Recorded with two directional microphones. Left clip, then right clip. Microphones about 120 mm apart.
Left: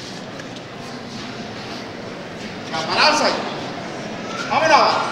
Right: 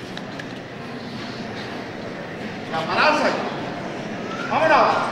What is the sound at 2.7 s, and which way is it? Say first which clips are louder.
Speech: left 2 dB; 15° left (ahead or behind).